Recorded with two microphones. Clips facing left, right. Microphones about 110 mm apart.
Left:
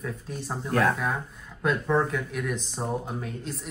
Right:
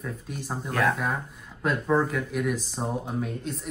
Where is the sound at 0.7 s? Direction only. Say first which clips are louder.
Left 1 dB; 35° left (ahead or behind).